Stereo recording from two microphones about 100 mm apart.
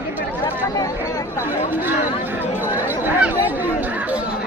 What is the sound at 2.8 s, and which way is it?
Chatter, 20° right (ahead or behind).